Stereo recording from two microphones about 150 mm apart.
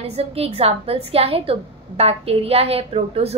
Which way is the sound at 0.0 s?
40° right (ahead or behind).